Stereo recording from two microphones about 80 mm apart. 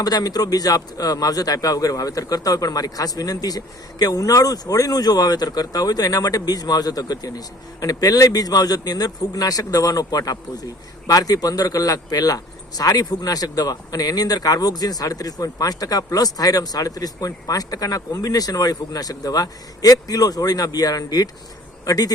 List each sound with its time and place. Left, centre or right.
0.0 s a man's voice: left